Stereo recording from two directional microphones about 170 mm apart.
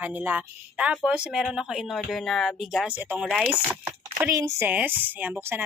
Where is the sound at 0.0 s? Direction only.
10° right (ahead or behind).